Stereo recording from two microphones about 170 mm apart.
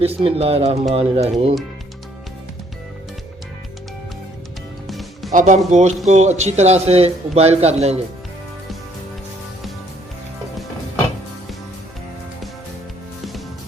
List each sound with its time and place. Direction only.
0.0 s a man's voice: 35° right (ahead or behind)
4.9 s music: centre (ahead or behind)
5.3 s a man's voice: 45° right (ahead or behind)